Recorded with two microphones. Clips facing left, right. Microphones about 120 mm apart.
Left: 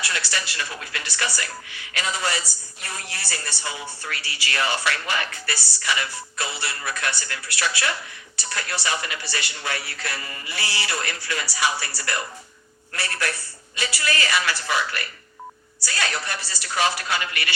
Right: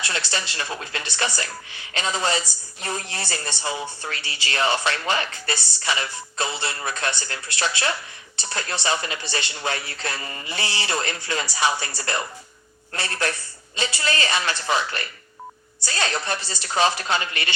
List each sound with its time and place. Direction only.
0.0 s speech: 25° right (ahead or behind)